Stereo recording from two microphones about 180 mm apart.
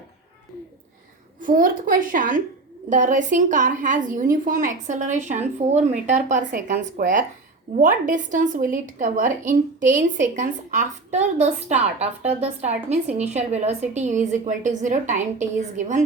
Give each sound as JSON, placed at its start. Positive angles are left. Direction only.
{"t": 1.4, "sound": "a woman's voice", "side_deg": -50}